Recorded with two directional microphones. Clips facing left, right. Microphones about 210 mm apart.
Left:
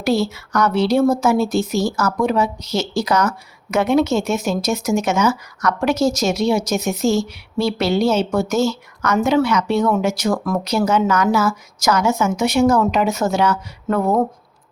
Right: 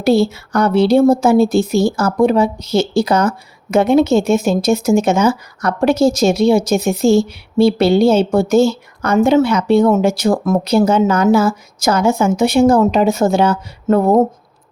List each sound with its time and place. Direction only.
0.0 s speech: 30° right (ahead or behind)